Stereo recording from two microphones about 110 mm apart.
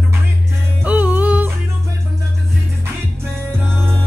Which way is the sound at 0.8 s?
15° right (ahead or behind).